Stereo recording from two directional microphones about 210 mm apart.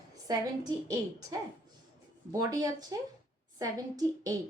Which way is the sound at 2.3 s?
15° right (ahead or behind).